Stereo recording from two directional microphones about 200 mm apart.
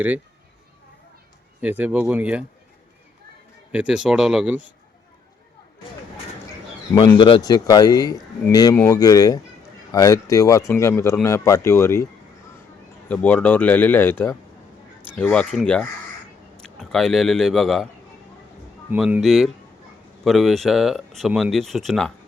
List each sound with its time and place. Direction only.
1.6 s speech: 10° right (ahead or behind)
3.7 s speech: 5° right (ahead or behind)
6.9 s a man's voice: 20° left (ahead or behind)
13.1 s a man's voice: 10° left (ahead or behind)
18.9 s speech: 5° right (ahead or behind)